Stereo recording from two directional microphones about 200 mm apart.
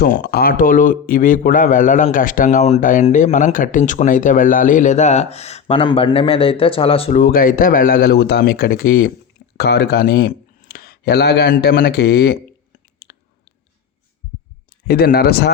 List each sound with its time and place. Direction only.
0.0 s speech: 45° left (ahead or behind); by 7.2 s 30° left (ahead or behind)
7.2 s speech: 45° left (ahead or behind)
13.0 s a sound: 50° left (ahead or behind)
14.8 s speech: 50° left (ahead or behind)